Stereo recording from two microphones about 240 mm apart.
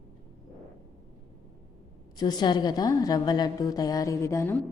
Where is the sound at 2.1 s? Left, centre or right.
Centre.